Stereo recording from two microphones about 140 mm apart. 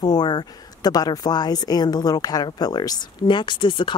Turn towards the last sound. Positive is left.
turn(degrees=35)  # may be behind; listen again after turning